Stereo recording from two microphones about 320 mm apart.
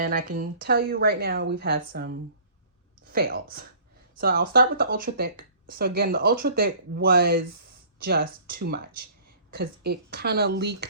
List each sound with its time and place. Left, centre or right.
0.0 s speech: right